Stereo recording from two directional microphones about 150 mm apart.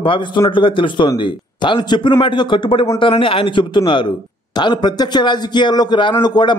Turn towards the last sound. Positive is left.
turn(degrees=30)  # may be behind; listen again after turning